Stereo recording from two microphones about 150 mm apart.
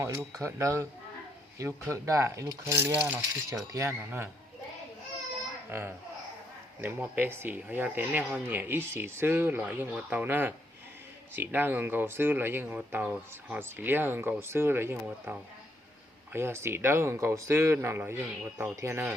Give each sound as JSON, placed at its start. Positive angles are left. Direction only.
{"t": 0.0, "sound": "speech", "side_deg": -20}
{"t": 5.7, "sound": "speech", "side_deg": -15}